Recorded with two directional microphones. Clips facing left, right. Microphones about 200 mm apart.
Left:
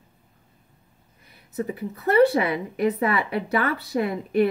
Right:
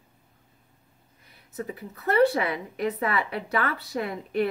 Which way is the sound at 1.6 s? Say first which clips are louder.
Left 6 dB; 20° left (ahead or behind).